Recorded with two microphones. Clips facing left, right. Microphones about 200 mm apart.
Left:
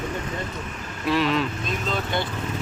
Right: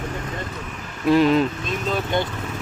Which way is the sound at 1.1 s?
45° right (ahead or behind).